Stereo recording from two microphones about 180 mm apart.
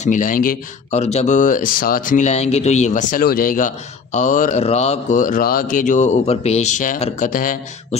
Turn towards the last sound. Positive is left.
turn(degrees=50)  # may be behind; listen again after turning